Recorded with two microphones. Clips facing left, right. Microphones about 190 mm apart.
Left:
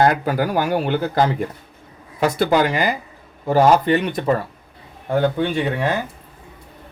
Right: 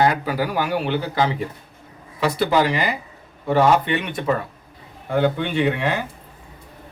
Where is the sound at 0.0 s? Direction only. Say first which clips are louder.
Left 2 dB; 50° left (ahead or behind).